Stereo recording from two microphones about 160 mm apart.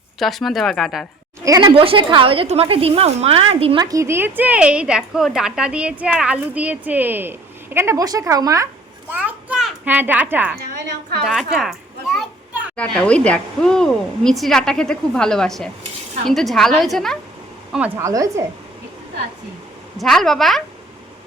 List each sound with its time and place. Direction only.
0.2 s a child's voice: centre (ahead or behind)
1.5 s a woman's voice: 25° right (ahead or behind)
1.7 s a woman's voice: 35° right (ahead or behind)
3.8 s speech: 20° right (ahead or behind)
9.1 s a child's voice: 10° right (ahead or behind)
17.7 s a woman's voice: 10° right (ahead or behind)
20.0 s a child's voice: centre (ahead or behind)